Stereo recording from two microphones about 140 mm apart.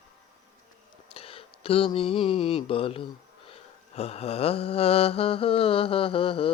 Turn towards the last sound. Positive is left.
turn(degrees=40)  # may be behind; listen again after turning